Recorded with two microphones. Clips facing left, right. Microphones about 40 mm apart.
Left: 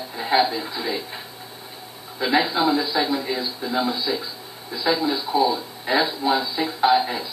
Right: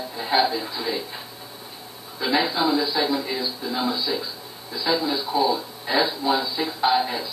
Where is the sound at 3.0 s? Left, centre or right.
Centre.